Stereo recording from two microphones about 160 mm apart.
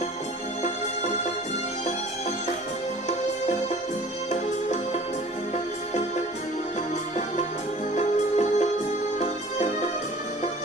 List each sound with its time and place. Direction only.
0.6 s music: 45° left (ahead or behind)
3.1 s music: 45° left (ahead or behind)
5.9 s music: 45° left (ahead or behind)
7.9 s music: 45° left (ahead or behind)